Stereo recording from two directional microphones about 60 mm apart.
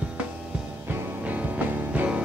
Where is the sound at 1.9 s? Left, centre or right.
Right.